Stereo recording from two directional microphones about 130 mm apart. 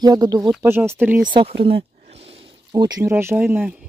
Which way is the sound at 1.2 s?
40° right (ahead or behind).